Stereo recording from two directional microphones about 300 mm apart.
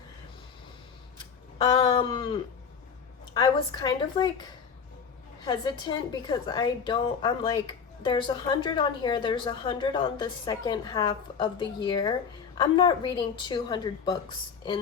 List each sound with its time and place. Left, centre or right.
1.8 s a sound: centre
3.3 s a woman's voice: centre
5.5 s a woman's voice: centre